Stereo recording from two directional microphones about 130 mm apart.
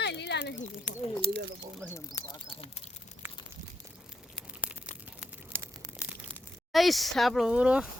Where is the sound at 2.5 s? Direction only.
45° left (ahead or behind).